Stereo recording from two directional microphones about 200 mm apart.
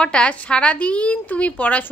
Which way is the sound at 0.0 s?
5° left (ahead or behind).